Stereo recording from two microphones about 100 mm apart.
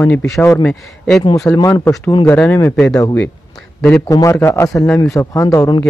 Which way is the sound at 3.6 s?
10° left (ahead or behind).